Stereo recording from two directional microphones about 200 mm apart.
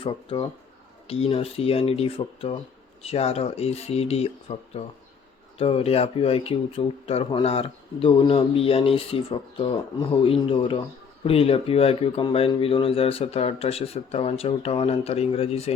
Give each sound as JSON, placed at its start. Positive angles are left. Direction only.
{"t": 0.0, "sound": "speech", "side_deg": 30}